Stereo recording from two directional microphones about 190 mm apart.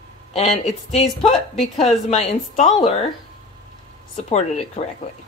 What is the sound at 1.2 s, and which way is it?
Speech, 30° left (ahead or behind).